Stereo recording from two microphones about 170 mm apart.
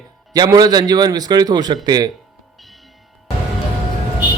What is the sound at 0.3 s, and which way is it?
A man's voice, 25° right (ahead or behind).